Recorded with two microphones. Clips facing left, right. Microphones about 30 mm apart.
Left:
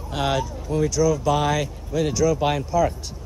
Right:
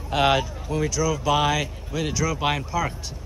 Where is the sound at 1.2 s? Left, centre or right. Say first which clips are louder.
Even; centre.